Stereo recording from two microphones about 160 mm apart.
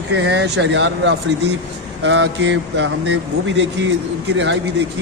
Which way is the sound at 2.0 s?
90° right.